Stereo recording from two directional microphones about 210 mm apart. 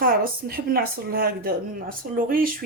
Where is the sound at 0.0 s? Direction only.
45° right (ahead or behind).